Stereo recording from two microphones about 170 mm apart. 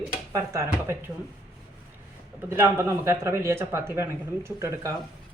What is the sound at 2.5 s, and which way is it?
Speech, 15° right (ahead or behind).